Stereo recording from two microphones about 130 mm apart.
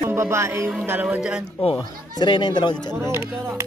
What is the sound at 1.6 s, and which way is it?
Speech, 45° left (ahead or behind).